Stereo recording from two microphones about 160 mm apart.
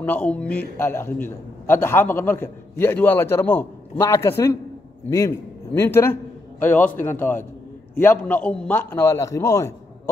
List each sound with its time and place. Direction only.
0.0 s a man's voice: 10° left (ahead or behind)